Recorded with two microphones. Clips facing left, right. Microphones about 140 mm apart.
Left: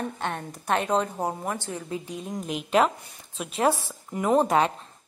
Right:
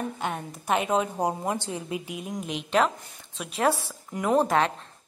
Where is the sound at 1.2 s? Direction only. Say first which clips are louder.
Right 2 dB; 15° right (ahead or behind); by 4.7 s centre (ahead or behind).